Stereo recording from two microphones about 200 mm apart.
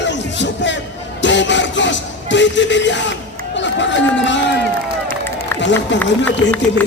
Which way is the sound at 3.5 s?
65° left (ahead or behind).